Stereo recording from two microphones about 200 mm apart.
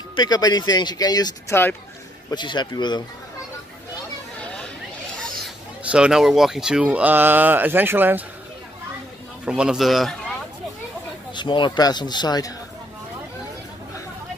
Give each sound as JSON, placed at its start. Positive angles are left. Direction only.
{"t": 0.1, "sound": "speech", "side_deg": 20}
{"t": 2.3, "sound": "speech", "side_deg": 20}
{"t": 4.4, "sound": "a sound", "side_deg": 5}
{"t": 5.9, "sound": "speech", "side_deg": -5}
{"t": 9.5, "sound": "speech", "side_deg": -5}
{"t": 11.3, "sound": "speech", "side_deg": 25}